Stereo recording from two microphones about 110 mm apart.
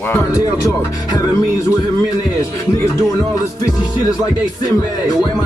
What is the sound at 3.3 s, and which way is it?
Music, 30° left (ahead or behind).